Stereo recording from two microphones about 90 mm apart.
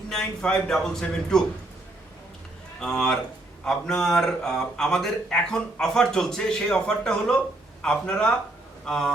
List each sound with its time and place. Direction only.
0.1 s a man's voice: 5° left (ahead or behind)
2.8 s a man's voice: 5° left (ahead or behind)